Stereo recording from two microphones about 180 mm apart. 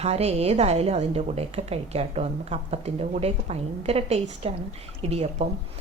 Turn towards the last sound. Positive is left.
turn(degrees=-35)  # may be behind; listen again after turning